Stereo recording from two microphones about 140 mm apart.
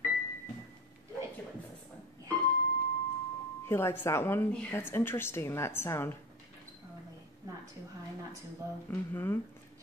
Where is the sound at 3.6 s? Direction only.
15° left (ahead or behind).